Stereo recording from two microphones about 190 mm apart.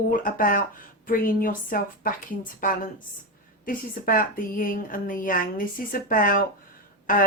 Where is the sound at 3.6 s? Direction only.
45° left (ahead or behind).